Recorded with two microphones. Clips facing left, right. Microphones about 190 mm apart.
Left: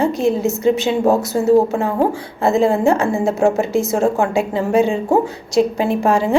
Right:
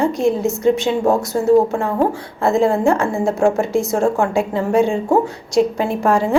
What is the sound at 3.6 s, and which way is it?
Speech, centre (ahead or behind).